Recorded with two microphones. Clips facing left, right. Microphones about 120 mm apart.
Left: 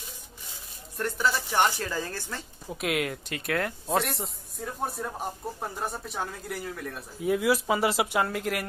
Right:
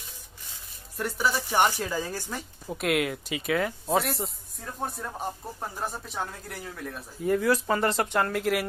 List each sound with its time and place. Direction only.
0.9 s a woman's voice: 5° right (ahead or behind)
2.7 s speech: centre (ahead or behind)